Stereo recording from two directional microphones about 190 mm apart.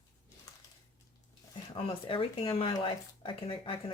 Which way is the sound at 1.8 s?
30° left (ahead or behind).